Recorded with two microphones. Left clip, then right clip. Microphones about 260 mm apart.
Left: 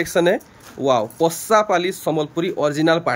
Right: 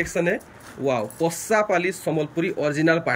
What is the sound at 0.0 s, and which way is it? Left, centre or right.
Speech, centre.